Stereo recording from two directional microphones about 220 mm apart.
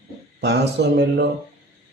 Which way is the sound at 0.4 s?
50° right (ahead or behind).